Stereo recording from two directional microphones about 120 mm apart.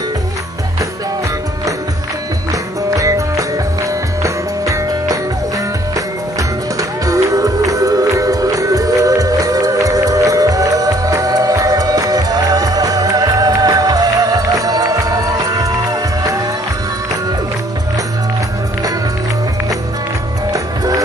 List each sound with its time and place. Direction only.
3.0 s music: 30° right (ahead or behind)
6.8 s music: 30° right (ahead or behind)
20.5 s music: 30° right (ahead or behind)